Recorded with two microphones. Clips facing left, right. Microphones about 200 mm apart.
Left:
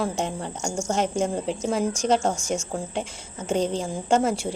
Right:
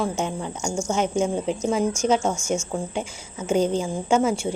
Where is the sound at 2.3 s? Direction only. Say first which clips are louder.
Right 2 dB; 35° left (ahead or behind).